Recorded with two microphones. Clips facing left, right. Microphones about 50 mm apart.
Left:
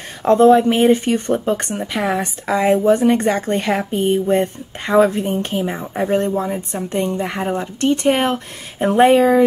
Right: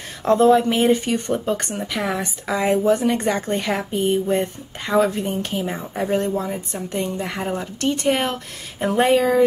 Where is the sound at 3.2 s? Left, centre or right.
Centre.